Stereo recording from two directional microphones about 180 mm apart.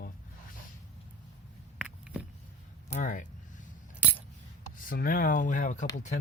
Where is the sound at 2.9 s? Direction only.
45° left (ahead or behind).